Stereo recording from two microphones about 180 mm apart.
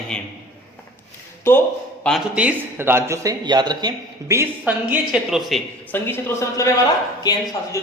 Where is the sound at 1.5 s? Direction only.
15° left (ahead or behind).